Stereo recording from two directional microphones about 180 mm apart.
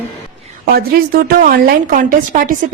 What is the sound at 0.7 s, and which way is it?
A woman's voice, 60° right (ahead or behind).